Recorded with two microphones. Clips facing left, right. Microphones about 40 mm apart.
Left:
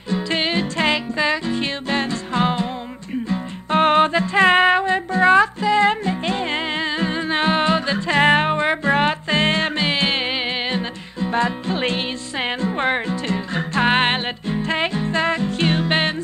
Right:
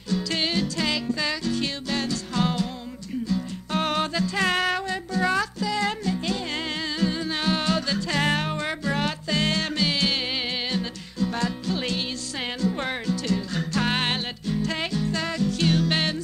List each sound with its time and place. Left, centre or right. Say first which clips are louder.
0.1 s music: left 5 dB; left